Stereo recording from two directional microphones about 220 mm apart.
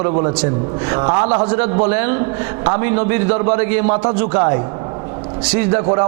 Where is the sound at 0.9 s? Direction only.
20° right (ahead or behind).